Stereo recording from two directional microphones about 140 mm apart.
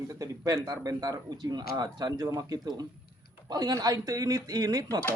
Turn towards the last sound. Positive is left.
turn(degrees=-25)  # may be behind; listen again after turning